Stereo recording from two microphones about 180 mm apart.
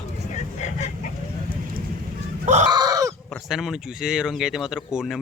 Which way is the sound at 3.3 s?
Centre (ahead or behind).